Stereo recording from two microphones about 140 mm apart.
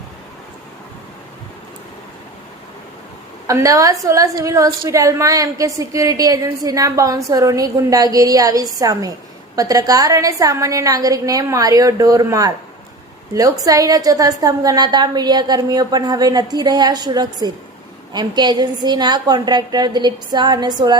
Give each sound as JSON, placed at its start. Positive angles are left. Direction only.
{"t": 3.4, "sound": "a woman's voice", "side_deg": -25}